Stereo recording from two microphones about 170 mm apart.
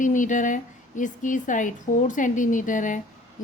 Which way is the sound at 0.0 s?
50° left (ahead or behind).